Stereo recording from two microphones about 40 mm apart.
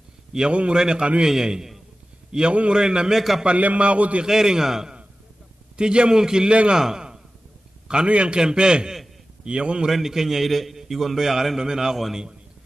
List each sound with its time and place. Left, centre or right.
0.3 s a man's voice: centre
2.7 s a man's voice: centre
3.2 s a man's voice: centre
3.4 s a man's voice: right
4.3 s a man's voice: centre
5.8 s a man's voice: right
6.5 s a man's voice: right
6.8 s a man's voice: centre
9.8 s a man's voice: centre